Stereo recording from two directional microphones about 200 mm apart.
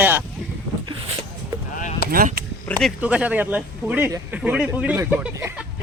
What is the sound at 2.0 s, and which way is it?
Speech, 45° right (ahead or behind).